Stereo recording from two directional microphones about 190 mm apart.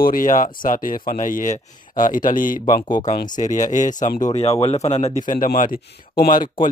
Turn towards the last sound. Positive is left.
turn(degrees=20)  # may be behind; listen again after turning